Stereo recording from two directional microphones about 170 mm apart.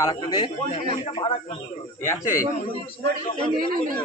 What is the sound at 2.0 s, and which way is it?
Speech, 15° left (ahead or behind).